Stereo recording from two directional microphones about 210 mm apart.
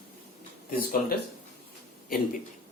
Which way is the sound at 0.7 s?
45° left (ahead or behind).